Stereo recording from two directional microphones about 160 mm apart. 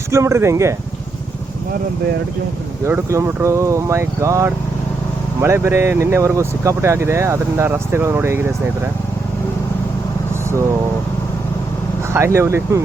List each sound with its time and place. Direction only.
0.1 s speech: 15° right (ahead or behind)
2.8 s speech: 15° right (ahead or behind)
12.1 s speech: 15° right (ahead or behind)